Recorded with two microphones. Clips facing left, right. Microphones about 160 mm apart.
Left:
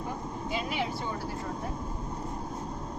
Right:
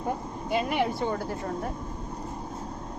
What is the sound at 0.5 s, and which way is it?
Speech, 55° right (ahead or behind).